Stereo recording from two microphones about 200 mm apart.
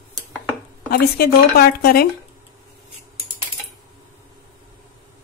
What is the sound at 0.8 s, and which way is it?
Speech, 50° left (ahead or behind).